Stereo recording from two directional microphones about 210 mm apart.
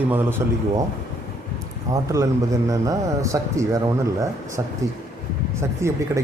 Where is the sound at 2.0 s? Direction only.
15° right (ahead or behind).